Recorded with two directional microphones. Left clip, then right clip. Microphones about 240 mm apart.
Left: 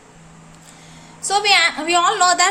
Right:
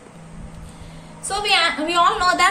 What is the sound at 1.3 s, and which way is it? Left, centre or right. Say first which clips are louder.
A woman's voice: left 3 dB; left.